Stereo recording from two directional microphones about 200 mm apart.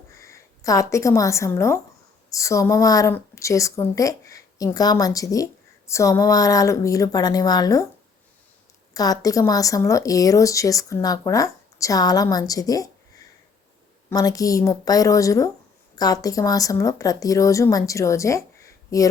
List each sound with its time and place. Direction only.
0.1 s a woman's voice: 15° left (ahead or behind)
8.9 s speech: 20° left (ahead or behind)
14.1 s speech: 20° left (ahead or behind)